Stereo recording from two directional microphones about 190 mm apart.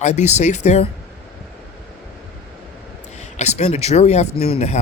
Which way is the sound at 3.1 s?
35° left (ahead or behind).